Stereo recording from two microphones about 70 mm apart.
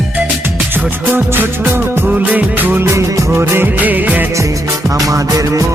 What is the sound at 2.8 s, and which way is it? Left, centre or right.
Music of bollywood, right.